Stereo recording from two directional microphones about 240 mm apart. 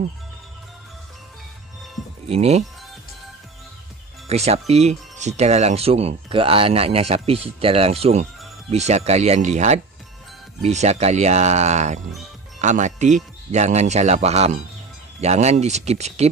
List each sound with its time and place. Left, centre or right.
2.2 s speech: right
4.3 s speech: right